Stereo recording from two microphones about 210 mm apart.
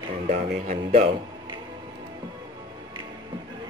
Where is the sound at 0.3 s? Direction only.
35° right (ahead or behind).